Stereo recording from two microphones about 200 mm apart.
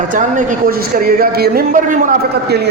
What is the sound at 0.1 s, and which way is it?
A man's voice, 40° right (ahead or behind).